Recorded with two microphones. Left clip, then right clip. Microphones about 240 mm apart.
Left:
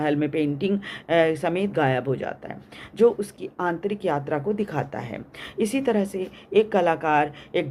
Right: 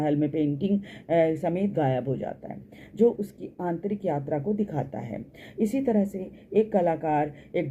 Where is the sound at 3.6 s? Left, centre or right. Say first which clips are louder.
Left 5 dB; left.